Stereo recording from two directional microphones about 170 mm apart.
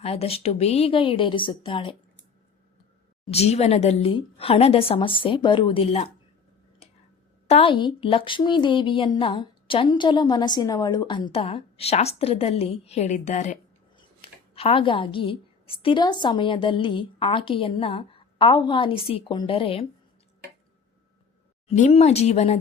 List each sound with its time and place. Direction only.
0.0 s a woman's voice: 35° left (ahead or behind)
3.2 s a woman's voice: 40° left (ahead or behind)
7.4 s a woman's voice: 35° left (ahead or behind)
21.7 s a woman's voice: 40° left (ahead or behind)